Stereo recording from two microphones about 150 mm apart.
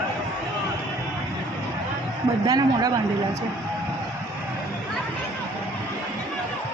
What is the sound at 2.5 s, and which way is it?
Speech, 25° right (ahead or behind).